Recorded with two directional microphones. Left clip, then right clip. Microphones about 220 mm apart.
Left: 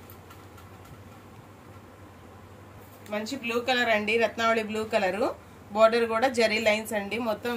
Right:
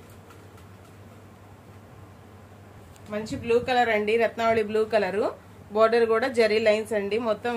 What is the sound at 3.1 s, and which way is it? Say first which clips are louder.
Speech: right 5 dB; 30° right (ahead or behind).